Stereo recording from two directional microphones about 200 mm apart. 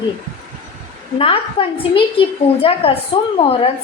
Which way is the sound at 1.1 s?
25° left (ahead or behind).